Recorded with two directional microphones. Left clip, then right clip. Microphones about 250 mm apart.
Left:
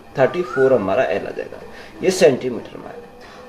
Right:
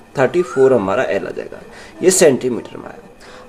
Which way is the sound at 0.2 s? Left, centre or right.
Right.